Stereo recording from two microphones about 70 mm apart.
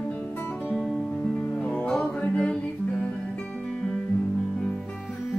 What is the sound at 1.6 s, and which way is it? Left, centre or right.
Music, centre.